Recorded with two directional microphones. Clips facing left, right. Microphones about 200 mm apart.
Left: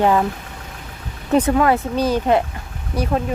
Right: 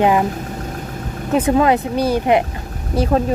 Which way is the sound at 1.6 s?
20° right (ahead or behind).